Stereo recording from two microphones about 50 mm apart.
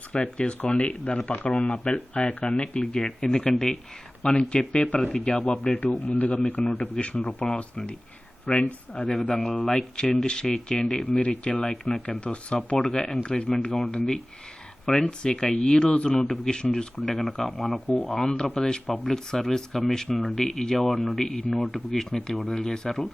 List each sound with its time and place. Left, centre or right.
0.1 s speech: left
1.4 s speech: left
1.6 s speech: centre
6.7 s speech: centre
11.0 s speech: left
11.6 s speech: centre
12.0 s speech: left
13.7 s speech: centre
13.9 s speech: centre
17.1 s speech: centre
18.2 s speech: centre